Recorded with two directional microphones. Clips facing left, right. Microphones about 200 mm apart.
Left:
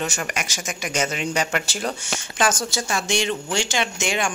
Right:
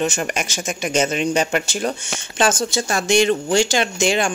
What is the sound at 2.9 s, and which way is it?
Speech, 45° right (ahead or behind).